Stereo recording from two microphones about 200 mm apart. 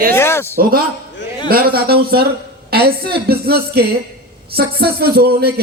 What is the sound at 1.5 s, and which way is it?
Speech, 50° right (ahead or behind).